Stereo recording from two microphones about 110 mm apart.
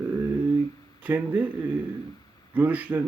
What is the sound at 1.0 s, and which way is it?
Speech, 15° right (ahead or behind).